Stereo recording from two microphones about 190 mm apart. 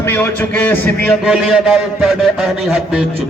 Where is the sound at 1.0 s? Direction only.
Centre (ahead or behind).